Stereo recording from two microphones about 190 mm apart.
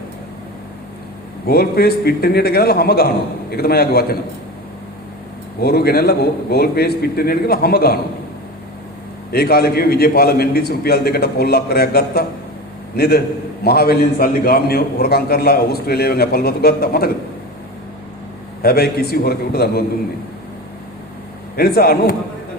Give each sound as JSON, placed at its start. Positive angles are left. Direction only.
{"t": 1.5, "sound": "a man's voice", "side_deg": 55}
{"t": 5.5, "sound": "a man's voice", "side_deg": 55}
{"t": 9.3, "sound": "a man's voice", "side_deg": 55}
{"t": 18.6, "sound": "a man's voice", "side_deg": 55}
{"t": 21.5, "sound": "a man's voice", "side_deg": 55}